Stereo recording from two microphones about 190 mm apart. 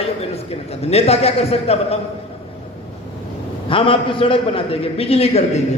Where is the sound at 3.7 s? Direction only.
25° left (ahead or behind).